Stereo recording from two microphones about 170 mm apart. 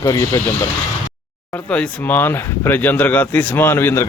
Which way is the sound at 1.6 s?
5° left (ahead or behind).